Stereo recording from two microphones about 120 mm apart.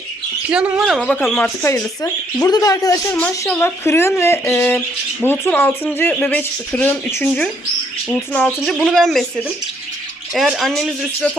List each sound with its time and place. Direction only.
0.5 s speech: 5° right (ahead or behind)
1.4 s speech: 20° left (ahead or behind)
2.0 s speech: 30° left (ahead or behind); by 6.9 s 15° left (ahead or behind)
8.1 s speech: 10° left (ahead or behind)
10.3 s speech: centre (ahead or behind)